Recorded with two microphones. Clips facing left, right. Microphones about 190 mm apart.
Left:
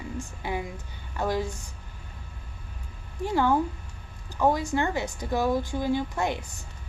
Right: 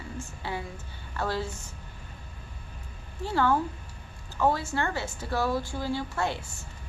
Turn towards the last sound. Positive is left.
turn(degrees=15)  # may be behind; listen again after turning